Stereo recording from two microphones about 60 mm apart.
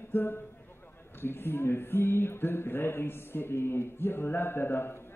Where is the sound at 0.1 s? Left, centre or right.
Left.